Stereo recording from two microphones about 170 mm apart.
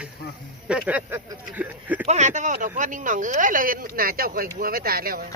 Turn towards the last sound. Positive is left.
turn(degrees=-60)  # may be behind; listen again after turning